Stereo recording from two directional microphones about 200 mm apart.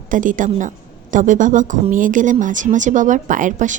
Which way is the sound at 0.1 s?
40° right (ahead or behind).